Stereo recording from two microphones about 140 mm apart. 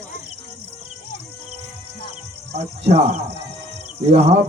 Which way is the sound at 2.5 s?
45° right (ahead or behind).